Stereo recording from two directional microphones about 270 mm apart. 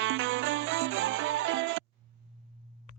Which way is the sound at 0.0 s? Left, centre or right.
Right.